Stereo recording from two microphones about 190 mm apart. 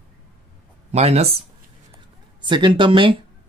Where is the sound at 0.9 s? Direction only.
35° right (ahead or behind).